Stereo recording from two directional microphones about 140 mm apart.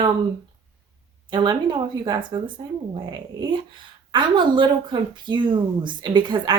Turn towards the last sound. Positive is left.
turn(degrees=-35)  # may be behind; listen again after turning